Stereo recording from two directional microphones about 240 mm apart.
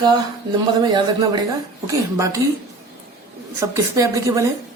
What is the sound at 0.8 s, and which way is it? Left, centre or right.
Speech, centre.